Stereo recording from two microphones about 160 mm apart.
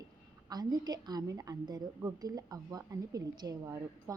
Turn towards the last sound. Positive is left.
turn(degrees=-20)  # may be behind; listen again after turning